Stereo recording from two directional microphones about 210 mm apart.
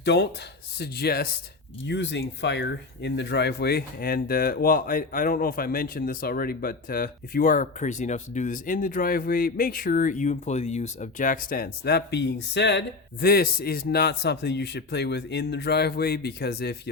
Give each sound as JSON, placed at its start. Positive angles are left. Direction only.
{"t": 0.0, "sound": "speech", "side_deg": 55}
{"t": 1.9, "sound": "speech", "side_deg": 55}